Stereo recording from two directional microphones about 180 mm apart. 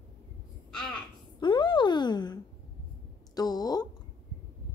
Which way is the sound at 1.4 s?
25° left (ahead or behind).